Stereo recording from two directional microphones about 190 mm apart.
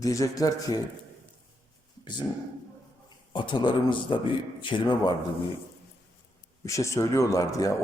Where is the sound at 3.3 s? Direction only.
25° left (ahead or behind).